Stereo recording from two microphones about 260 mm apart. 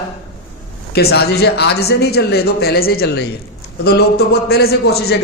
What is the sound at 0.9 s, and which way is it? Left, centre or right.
A man's voice, left.